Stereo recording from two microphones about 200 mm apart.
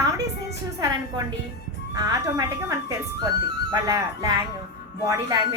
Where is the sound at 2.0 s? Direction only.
20° right (ahead or behind).